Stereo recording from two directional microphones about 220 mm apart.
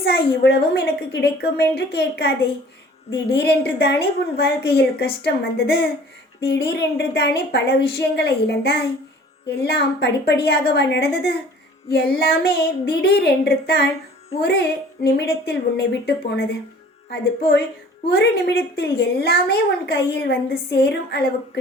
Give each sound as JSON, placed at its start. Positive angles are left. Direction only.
{"t": 0.0, "sound": "a woman's voice", "side_deg": 50}
{"t": 15.0, "sound": "a woman's voice", "side_deg": 45}